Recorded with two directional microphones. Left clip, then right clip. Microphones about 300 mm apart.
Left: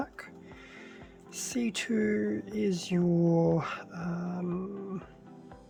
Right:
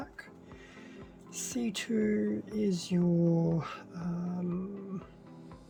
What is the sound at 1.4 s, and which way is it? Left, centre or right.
Speech, centre.